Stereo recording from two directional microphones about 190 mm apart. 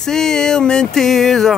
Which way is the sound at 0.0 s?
5° left (ahead or behind).